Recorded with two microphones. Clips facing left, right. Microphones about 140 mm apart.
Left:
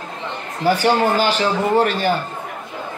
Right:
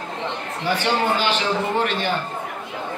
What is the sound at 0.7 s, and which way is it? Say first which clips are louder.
A man's voice: left 5 dB; 40° left (ahead or behind).